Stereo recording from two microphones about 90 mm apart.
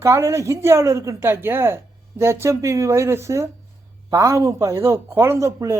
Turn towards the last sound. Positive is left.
turn(degrees=-35)  # may be behind; listen again after turning